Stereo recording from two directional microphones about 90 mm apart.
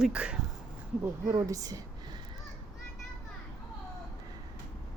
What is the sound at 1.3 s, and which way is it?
Speech, 40° right (ahead or behind).